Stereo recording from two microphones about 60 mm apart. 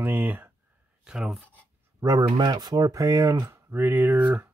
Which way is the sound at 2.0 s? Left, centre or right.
Right.